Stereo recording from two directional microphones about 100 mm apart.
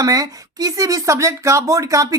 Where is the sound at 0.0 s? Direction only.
40° right (ahead or behind).